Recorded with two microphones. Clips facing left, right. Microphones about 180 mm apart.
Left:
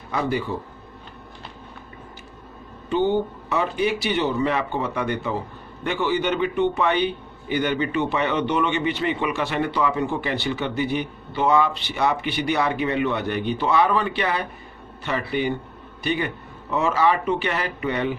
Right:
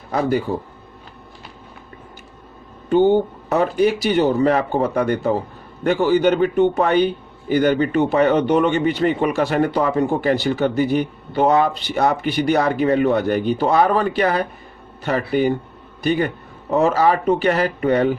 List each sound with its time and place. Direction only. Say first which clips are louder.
0.1 s a man's voice: right 5 dB; 40° right (ahead or behind)
2.9 s a man's voice: right 6 dB; 50° right (ahead or behind)